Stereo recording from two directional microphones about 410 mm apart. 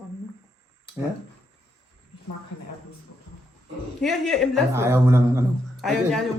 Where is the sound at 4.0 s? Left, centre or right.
Centre.